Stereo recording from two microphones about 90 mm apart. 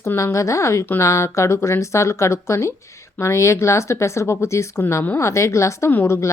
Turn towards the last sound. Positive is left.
turn(degrees=30)  # may be behind; listen again after turning